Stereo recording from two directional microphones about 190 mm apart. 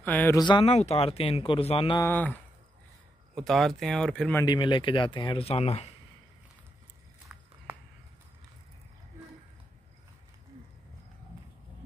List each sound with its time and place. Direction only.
0.0 s speech: 10° left (ahead or behind)
0.4 s speech: 25° left (ahead or behind)
2.0 s speech: 10° left (ahead or behind)
3.3 s speech: centre (ahead or behind)
4.5 s speech: 25° left (ahead or behind)
7.3 s walk: 5° right (ahead or behind)